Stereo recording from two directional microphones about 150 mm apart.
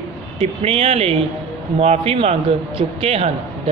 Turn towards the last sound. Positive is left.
turn(degrees=-40)  # may be behind; listen again after turning